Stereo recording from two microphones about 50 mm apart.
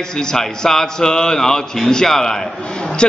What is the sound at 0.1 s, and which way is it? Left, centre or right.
A man's voice, centre.